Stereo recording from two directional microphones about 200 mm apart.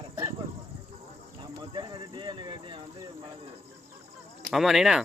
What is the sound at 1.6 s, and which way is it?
Clip-clop, 25° right (ahead or behind).